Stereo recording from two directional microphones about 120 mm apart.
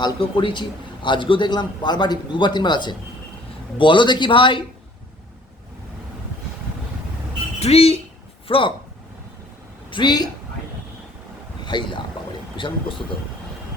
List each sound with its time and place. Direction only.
0.0 s a man's voice: 45° left (ahead or behind)
7.6 s speech: 55° left (ahead or behind)
9.9 s a man's voice: 40° left (ahead or behind)
11.6 s speech: 40° left (ahead or behind)